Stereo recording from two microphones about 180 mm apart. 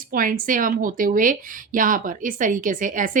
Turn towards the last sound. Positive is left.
turn(degrees=-45)  # may be behind; listen again after turning